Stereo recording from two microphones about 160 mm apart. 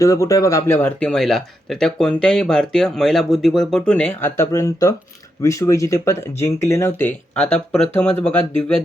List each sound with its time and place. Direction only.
0.0 s speech: 20° left (ahead or behind)